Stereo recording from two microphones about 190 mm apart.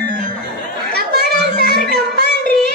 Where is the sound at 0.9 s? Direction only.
55° right (ahead or behind).